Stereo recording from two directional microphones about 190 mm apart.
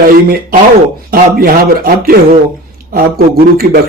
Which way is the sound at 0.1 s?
50° right (ahead or behind).